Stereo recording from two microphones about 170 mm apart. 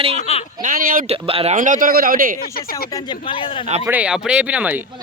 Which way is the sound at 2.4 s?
60° left (ahead or behind).